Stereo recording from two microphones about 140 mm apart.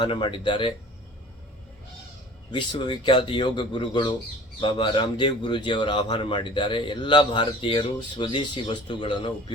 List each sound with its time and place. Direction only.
0.0 s a man's voice: 35° left (ahead or behind)
2.5 s a man's voice: 35° left (ahead or behind)